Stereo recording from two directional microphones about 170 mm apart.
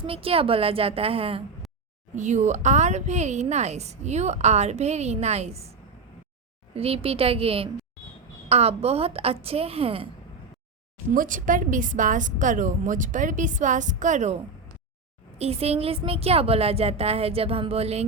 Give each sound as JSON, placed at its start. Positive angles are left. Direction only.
{"t": 0.0, "sound": "speech", "side_deg": -35}
{"t": 2.1, "sound": "speech", "side_deg": -45}
{"t": 6.7, "sound": "speech", "side_deg": -35}
{"t": 11.1, "sound": "a woman's voice", "side_deg": -50}
{"t": 15.4, "sound": "speech", "side_deg": -35}